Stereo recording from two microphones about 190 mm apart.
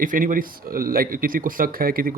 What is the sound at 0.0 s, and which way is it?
Speech, 45° right (ahead or behind).